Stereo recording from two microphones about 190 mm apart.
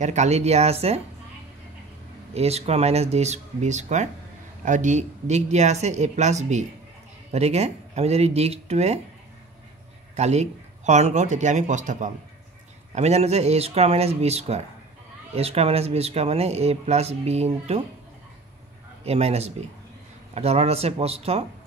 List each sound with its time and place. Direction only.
0.0 s speech: 40° right (ahead or behind)
2.3 s speech: 35° right (ahead or behind)
10.1 s speech: 35° right (ahead or behind)
19.0 s speech: 35° right (ahead or behind)